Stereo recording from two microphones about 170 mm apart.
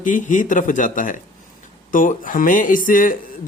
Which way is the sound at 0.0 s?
50° left (ahead or behind).